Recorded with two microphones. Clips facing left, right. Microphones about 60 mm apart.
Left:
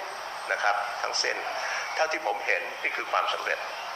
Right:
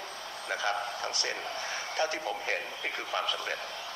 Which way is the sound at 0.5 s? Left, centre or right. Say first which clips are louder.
Left 5 dB; left.